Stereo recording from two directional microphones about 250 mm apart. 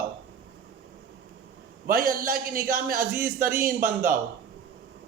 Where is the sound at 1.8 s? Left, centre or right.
Right.